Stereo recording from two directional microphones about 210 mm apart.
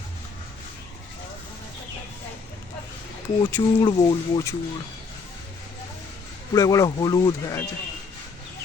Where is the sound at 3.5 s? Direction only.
20° left (ahead or behind).